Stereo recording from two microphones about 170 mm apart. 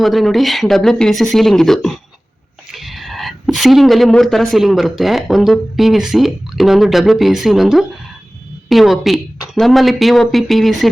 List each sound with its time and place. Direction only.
0.0 s speech: centre (ahead or behind)